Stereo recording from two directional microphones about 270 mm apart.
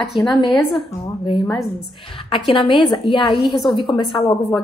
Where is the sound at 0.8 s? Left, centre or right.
Centre.